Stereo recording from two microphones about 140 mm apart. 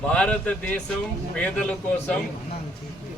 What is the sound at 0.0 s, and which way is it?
Speech, 10° left (ahead or behind).